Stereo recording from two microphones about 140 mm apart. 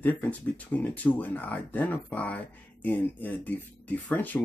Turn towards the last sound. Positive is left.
turn(degrees=10)  # may be behind; listen again after turning